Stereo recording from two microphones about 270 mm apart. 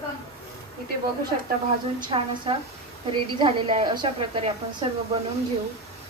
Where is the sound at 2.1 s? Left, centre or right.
Centre.